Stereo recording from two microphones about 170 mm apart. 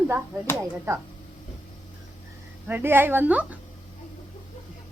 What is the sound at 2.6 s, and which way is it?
Speech, 10° right (ahead or behind).